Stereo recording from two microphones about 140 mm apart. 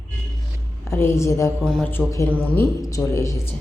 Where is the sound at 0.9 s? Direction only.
20° left (ahead or behind).